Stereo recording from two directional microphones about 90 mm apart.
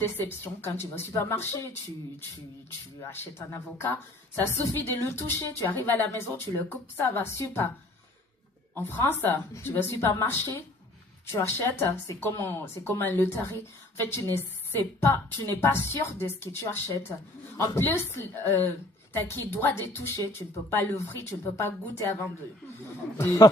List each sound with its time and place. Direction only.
0.0 s speech: 25° left (ahead or behind)
3.0 s speech: 30° left (ahead or behind)
8.7 s speech: 25° left (ahead or behind)